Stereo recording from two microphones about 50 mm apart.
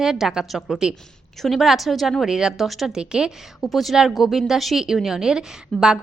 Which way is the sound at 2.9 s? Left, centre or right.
Centre.